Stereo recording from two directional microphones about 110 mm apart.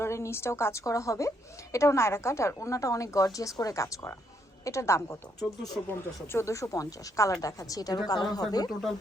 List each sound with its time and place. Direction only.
0.0 s a woman's voice: 25° left (ahead or behind)